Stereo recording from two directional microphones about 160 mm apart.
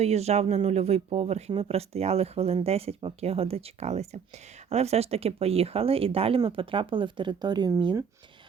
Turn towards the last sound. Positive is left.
turn(degrees=-30)  # may be behind; listen again after turning